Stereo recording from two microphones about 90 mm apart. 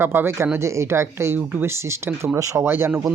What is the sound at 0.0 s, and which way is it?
Speech, 25° right (ahead or behind).